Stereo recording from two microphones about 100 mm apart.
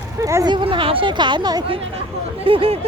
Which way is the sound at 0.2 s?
30° right (ahead or behind).